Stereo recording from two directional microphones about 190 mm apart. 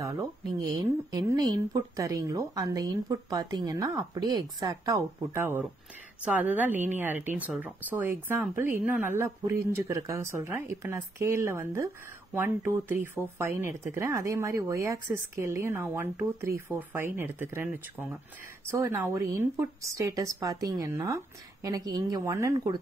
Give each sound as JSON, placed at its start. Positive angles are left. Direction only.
{"t": 0.0, "sound": "speech", "side_deg": -20}